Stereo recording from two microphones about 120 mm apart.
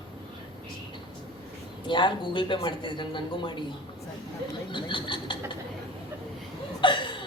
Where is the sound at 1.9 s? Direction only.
40° left (ahead or behind).